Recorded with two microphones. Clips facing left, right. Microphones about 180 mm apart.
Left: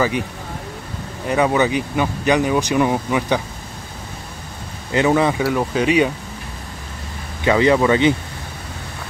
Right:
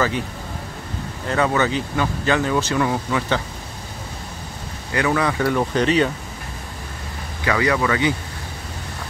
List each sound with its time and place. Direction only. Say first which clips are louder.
1.2 s speech: left 3 dB; 15° left (ahead or behind)
4.9 s speech: left 4 dB; 25° left (ahead or behind)
5.4 s speech: left 1 dB; 5° left (ahead or behind)
7.4 s speech: left 5 dB; 25° left (ahead or behind)